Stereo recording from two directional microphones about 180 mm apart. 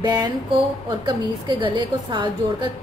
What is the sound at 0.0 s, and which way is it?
A woman's voice, 25° right (ahead or behind).